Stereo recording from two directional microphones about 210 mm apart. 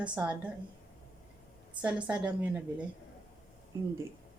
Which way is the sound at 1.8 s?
5° right (ahead or behind).